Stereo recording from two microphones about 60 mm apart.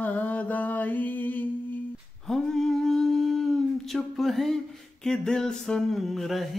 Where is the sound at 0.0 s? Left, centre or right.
Left.